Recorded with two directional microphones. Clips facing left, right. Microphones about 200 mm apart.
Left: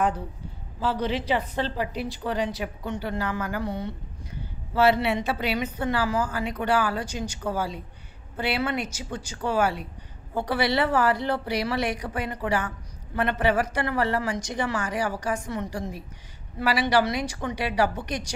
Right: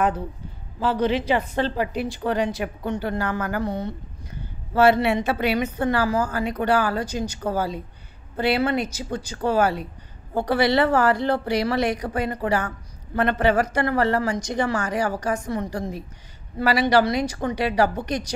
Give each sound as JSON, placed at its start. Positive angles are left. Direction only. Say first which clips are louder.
{"t": 0.7, "sound": "a woman's voice", "louder": "right 5 dB", "side_deg": -55}